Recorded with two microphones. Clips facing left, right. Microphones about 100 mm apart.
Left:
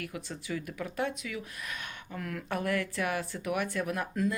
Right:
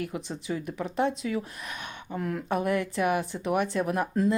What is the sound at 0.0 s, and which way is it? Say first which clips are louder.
Speech: right 6 dB; 20° right (ahead or behind).